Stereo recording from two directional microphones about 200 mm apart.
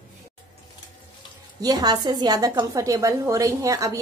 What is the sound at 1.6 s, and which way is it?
A woman's voice, 20° right (ahead or behind).